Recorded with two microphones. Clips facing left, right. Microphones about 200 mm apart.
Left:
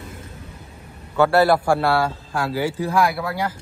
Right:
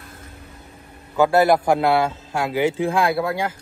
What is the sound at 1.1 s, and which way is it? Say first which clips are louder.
A man's voice: even; 15° right (ahead or behind).